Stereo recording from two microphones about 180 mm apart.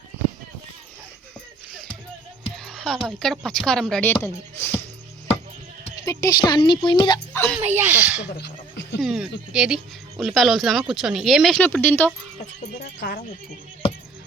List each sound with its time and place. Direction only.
2.6 s speech: centre (ahead or behind)
6.1 s speech: 20° left (ahead or behind)
7.6 s speech: 10° right (ahead or behind)
8.4 s a sound: 70° left (ahead or behind)
9.0 s speech: 5° right (ahead or behind)
12.8 s speech: 70° left (ahead or behind)